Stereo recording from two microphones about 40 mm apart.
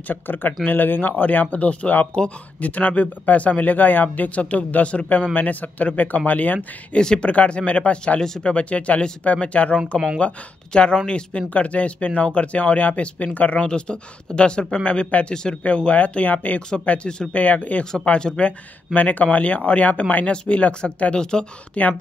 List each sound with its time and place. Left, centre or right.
0.1 s speech: left
3.7 s speech: left
6.9 s speech: left
8.2 s speech: centre
8.5 s speech: left
9.8 s speech: centre
10.1 s speech: left
13.6 s speech: left
20.2 s speech: left
21.7 s speech: left